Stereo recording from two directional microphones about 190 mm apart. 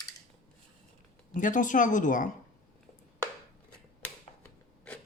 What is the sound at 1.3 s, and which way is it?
Speech, 45° left (ahead or behind).